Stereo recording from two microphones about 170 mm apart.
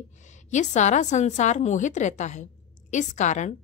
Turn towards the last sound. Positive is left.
turn(degrees=45)  # may be behind; listen again after turning